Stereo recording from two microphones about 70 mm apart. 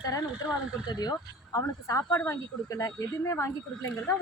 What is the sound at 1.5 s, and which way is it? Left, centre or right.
Speech, left.